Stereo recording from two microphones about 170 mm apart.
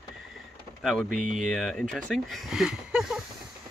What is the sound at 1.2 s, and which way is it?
Speech, 50° right (ahead or behind).